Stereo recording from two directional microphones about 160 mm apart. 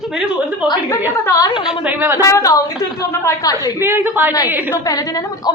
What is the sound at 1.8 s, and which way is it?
Speech, 15° right (ahead or behind).